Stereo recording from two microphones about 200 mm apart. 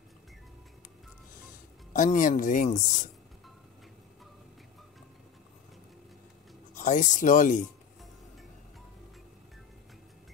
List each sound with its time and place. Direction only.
2.0 s speech: 40° left (ahead or behind)
6.7 s speech: 40° left (ahead or behind)